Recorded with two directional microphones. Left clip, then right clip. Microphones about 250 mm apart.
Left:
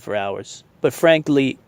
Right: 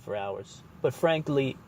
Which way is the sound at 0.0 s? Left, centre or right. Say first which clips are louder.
Left 9 dB; left.